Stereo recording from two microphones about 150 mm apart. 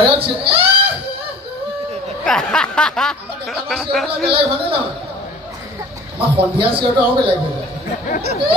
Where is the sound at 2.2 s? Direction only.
5° left (ahead or behind).